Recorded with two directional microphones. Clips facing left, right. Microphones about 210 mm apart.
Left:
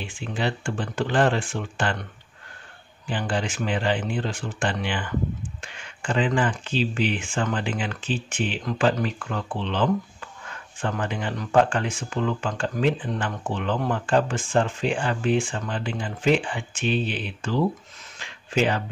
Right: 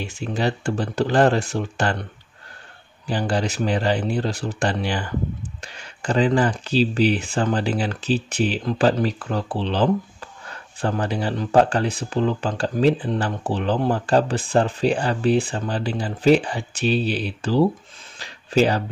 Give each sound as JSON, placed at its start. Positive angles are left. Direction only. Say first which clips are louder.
{"t": 0.0, "sound": "speech", "louder": "right 4 dB", "side_deg": -40}
{"t": 3.1, "sound": "speech", "louder": "right 4 dB", "side_deg": -40}
{"t": 18.2, "sound": "a sound", "louder": "right 5 dB", "side_deg": -35}